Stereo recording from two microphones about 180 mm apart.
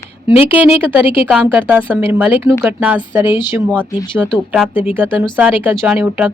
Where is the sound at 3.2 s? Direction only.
25° left (ahead or behind).